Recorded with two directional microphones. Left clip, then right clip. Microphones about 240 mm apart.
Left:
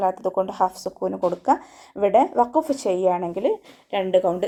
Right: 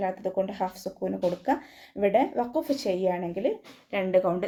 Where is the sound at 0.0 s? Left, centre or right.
Centre.